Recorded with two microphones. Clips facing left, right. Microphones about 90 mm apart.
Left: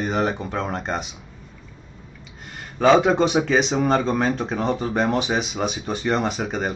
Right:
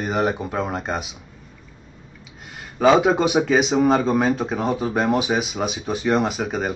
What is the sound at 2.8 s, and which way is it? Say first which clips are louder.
Speech: even; 5° right (ahead or behind).